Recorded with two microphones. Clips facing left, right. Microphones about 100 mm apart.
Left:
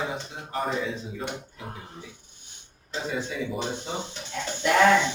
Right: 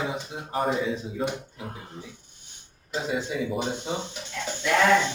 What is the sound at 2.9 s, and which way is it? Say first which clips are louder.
Speech: right 2 dB; 10° right (ahead or behind).